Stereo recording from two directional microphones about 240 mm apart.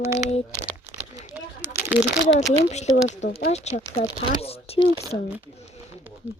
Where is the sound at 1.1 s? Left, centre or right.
Centre.